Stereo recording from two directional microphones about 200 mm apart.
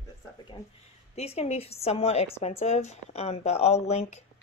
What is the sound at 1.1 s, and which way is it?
Speech, 30° left (ahead or behind).